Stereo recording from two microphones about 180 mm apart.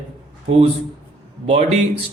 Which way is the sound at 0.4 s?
30° right (ahead or behind).